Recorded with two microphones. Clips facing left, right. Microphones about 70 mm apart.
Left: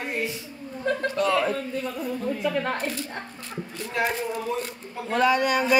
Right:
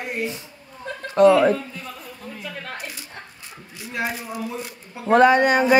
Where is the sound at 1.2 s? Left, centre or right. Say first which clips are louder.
Right 13 dB; right.